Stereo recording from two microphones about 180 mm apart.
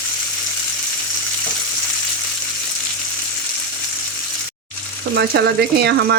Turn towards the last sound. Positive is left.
turn(degrees=-70)  # may be behind; listen again after turning